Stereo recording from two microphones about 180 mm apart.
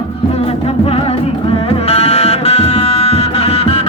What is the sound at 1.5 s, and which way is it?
Music, 35° left (ahead or behind).